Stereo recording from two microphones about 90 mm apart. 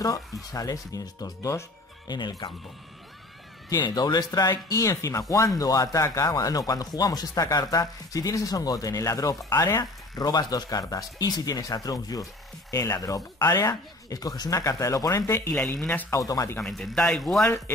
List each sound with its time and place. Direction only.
0.5 s speech: 40° left (ahead or behind)
2.0 s speech: 50° left (ahead or behind)
3.8 s speech: 50° left (ahead or behind)
16.6 s speech: 5° left (ahead or behind)